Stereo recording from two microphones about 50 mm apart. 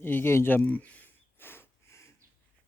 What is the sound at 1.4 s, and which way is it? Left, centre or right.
Snort, left.